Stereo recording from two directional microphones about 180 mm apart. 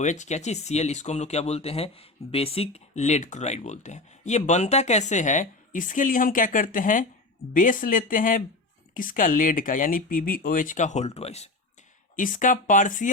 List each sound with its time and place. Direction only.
0.0 s speech: 40° left (ahead or behind)
12.1 s speech: 45° left (ahead or behind)